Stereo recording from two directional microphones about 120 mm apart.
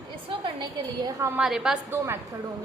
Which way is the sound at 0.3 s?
40° right (ahead or behind).